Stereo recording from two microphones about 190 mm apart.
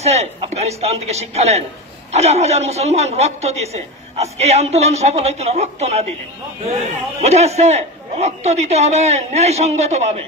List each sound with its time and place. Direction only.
0.0 s a man's voice: 35° right (ahead or behind)
7.2 s a man's voice: 35° right (ahead or behind)